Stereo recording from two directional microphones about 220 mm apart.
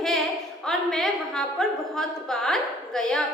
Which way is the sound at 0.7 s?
Centre (ahead or behind).